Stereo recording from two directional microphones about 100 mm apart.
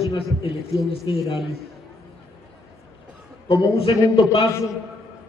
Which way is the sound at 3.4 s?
65° left (ahead or behind).